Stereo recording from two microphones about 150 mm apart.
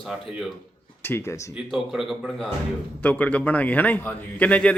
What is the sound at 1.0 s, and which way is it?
Speech, 15° left (ahead or behind).